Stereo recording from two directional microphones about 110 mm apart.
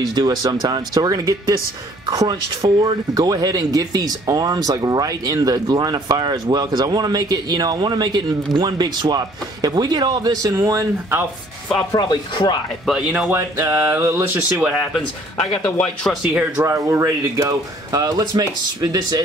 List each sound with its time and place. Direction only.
0.1 s speech: 40° right (ahead or behind)
11.9 s speech: 40° left (ahead or behind)
12.8 s speech: 5° right (ahead or behind)
13.3 s a sound: 20° right (ahead or behind)
14.6 s speech: 5° right (ahead or behind)
15.6 s a man's voice: 10° left (ahead or behind)
16.6 s speech: 25° right (ahead or behind)